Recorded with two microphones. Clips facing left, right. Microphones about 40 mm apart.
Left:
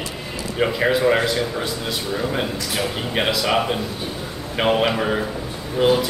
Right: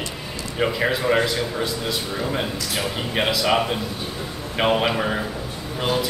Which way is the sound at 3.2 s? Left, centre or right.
Centre.